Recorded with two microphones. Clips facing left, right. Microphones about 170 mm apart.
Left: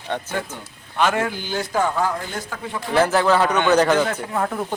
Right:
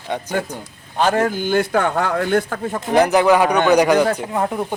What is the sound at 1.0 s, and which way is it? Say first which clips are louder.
A man's voice: right 4 dB; 40° right (ahead or behind).